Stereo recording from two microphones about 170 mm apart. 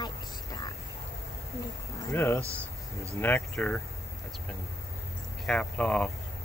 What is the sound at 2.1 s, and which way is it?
Speech, 15° left (ahead or behind).